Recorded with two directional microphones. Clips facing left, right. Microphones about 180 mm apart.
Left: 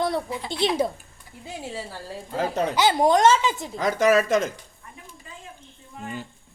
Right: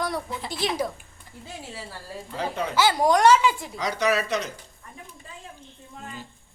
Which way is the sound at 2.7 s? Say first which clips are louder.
Left 1 dB; 20° left (ahead or behind).